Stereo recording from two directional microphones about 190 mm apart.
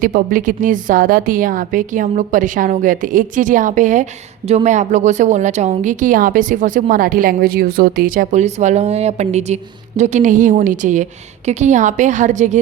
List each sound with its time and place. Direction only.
0.0 s a woman's voice: 45° right (ahead or behind)